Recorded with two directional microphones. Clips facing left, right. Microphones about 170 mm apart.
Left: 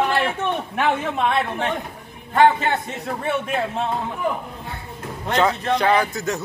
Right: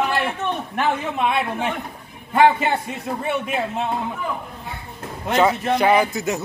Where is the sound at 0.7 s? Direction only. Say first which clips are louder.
Even; centre (ahead or behind).